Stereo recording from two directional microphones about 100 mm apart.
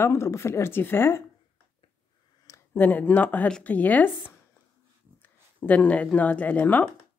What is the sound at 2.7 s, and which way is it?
Speech, 20° left (ahead or behind).